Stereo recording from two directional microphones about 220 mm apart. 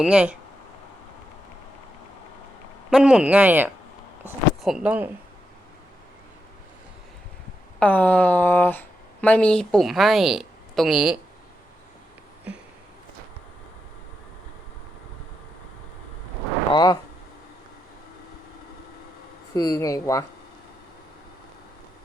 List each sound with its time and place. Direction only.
0.0 s speech: 5° right (ahead or behind)
2.9 s speech: 5° right (ahead or behind)
7.8 s speech: 5° left (ahead or behind)
16.7 s speech: 15° left (ahead or behind)
19.5 s speech: 15° left (ahead or behind)